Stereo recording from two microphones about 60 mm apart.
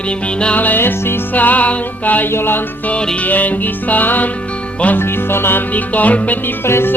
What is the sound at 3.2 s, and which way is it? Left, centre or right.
Music, left.